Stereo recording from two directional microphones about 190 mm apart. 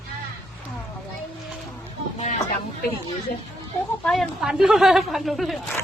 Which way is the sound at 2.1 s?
40° left (ahead or behind).